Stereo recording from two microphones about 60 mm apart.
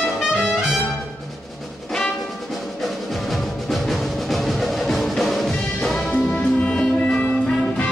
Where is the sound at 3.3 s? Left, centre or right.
Centre.